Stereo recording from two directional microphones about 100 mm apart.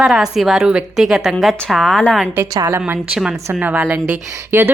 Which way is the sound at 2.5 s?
40° right (ahead or behind).